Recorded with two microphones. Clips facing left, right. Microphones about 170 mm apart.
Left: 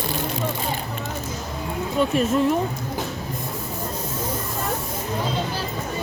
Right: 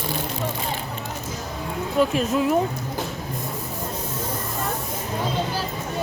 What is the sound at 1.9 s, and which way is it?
Speech, centre (ahead or behind).